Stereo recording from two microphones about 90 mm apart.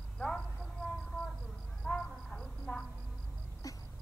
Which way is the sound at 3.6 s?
40° left (ahead or behind).